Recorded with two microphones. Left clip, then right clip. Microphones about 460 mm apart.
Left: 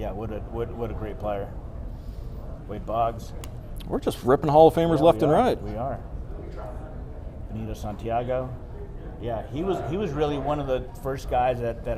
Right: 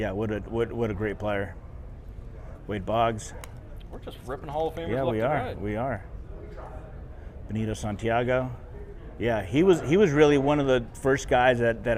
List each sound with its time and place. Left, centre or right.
0.0 s speech: right
2.6 s speech: right
3.9 s speech: left
5.6 s speech: right
7.5 s a man's voice: right